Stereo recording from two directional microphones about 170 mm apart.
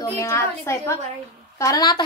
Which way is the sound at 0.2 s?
15° left (ahead or behind).